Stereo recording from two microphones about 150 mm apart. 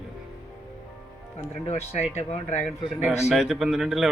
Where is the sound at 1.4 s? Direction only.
45° left (ahead or behind).